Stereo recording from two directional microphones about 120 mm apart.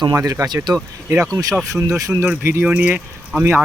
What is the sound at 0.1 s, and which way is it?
Speech, 25° right (ahead or behind).